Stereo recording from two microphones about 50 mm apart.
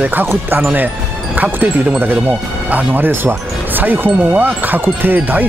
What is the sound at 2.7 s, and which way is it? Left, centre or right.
Speech, right.